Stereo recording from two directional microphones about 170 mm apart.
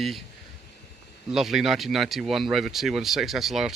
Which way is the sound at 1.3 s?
Centre (ahead or behind).